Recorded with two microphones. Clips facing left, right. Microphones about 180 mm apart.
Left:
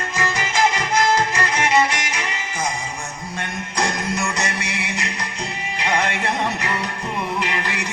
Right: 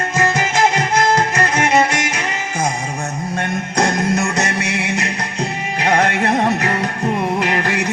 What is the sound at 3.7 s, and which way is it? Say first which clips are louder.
Music: right 6 dB; 45° right (ahead or behind).